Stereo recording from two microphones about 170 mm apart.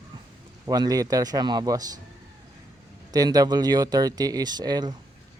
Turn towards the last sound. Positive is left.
turn(degrees=-25)  # may be behind; listen again after turning